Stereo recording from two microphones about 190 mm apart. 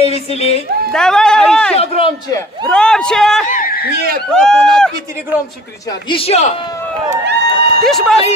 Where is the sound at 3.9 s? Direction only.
55° right (ahead or behind).